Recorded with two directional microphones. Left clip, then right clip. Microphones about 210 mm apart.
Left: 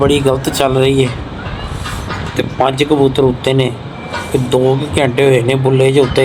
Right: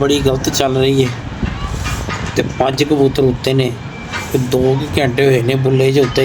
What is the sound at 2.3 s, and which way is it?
Speech, 10° right (ahead or behind).